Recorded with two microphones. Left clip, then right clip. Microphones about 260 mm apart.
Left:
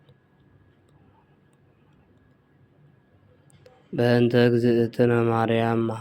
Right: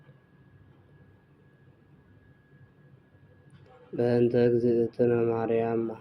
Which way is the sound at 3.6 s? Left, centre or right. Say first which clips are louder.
Left 4 dB; left.